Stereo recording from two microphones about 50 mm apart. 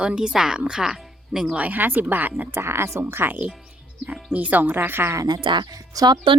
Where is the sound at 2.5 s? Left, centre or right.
Right.